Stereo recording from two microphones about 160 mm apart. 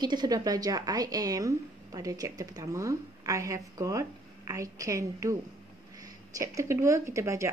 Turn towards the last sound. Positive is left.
turn(degrees=-20)  # may be behind; listen again after turning